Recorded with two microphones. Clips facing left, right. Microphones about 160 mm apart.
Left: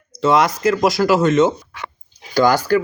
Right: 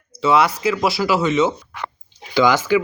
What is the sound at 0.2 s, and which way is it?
A man's voice, 40° left (ahead or behind).